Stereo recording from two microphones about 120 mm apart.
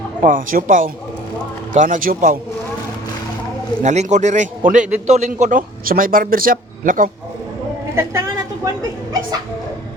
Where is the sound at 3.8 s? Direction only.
75° right (ahead or behind).